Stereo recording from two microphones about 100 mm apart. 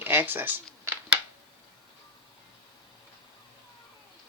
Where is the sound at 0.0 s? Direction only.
20° right (ahead or behind).